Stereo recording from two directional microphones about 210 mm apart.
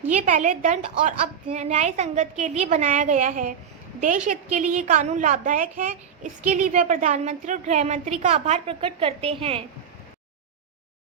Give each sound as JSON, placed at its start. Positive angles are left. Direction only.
{"t": 0.1, "sound": "a woman's voice", "side_deg": -35}